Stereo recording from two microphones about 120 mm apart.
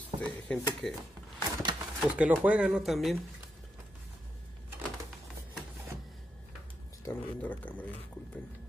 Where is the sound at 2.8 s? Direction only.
Centre (ahead or behind).